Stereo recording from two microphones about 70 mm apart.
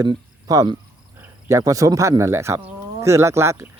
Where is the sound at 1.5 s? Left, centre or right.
Right.